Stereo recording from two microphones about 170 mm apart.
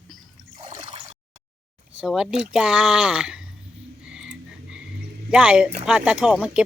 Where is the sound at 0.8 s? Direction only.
30° right (ahead or behind).